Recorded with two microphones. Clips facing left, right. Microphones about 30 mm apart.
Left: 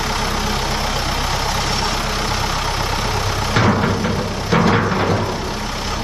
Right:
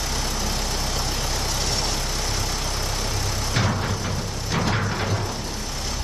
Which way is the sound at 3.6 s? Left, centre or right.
Left.